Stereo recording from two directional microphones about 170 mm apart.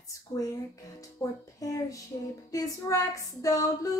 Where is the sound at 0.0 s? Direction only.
20° left (ahead or behind).